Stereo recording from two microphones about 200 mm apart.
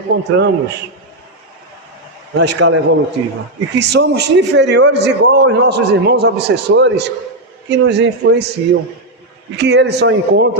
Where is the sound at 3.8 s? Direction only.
55° right (ahead or behind).